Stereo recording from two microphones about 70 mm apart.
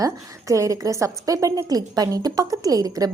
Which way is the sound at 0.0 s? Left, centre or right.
Right.